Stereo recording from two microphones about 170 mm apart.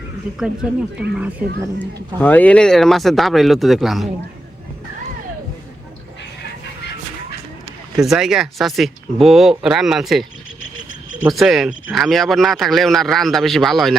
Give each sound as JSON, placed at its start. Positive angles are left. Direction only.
{"t": 0.3, "sound": "speech", "side_deg": -5}
{"t": 1.8, "sound": "speech", "side_deg": 10}
{"t": 7.9, "sound": "speech", "side_deg": -5}